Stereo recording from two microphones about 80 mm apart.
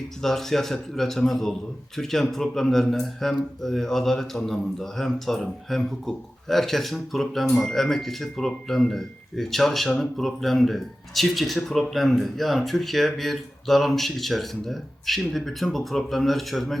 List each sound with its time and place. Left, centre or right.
0.2 s speech: centre